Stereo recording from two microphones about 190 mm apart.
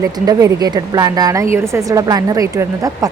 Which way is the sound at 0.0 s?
15° right (ahead or behind).